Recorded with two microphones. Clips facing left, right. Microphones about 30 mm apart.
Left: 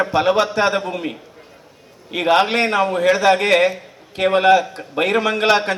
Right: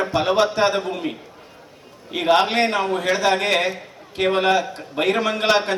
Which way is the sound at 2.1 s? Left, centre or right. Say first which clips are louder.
Left 2 dB; left.